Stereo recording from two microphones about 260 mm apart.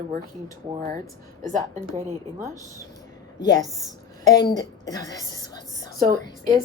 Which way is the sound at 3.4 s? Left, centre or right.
Centre.